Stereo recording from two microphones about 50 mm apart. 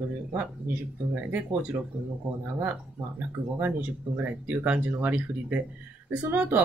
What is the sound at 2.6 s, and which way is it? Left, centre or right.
Speech, right.